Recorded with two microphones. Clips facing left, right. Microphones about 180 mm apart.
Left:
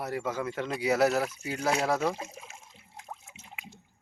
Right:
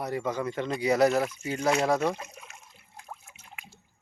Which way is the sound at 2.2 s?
25° left (ahead or behind).